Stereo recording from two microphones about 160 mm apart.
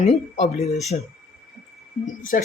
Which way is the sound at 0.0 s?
45° left (ahead or behind).